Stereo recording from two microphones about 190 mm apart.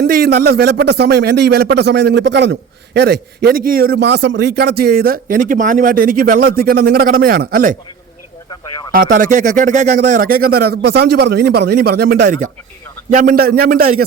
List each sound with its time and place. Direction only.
0.0 s a man's voice: 55° right (ahead or behind)
8.9 s speech: 45° right (ahead or behind)
13.1 s speech: 50° right (ahead or behind)